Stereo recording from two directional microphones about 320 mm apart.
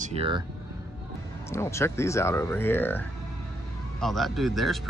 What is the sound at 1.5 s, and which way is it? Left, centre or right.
Speech, centre.